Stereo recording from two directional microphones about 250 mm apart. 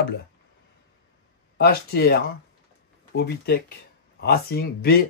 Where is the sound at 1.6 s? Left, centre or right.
Left.